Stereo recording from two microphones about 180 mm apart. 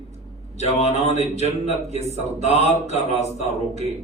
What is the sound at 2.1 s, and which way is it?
Speech, 40° right (ahead or behind).